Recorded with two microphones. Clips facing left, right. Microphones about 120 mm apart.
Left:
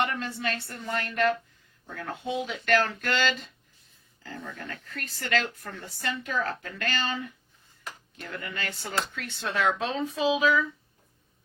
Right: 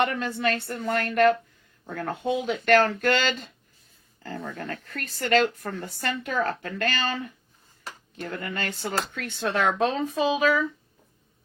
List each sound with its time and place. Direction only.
0.0 s speech: 55° right (ahead or behind)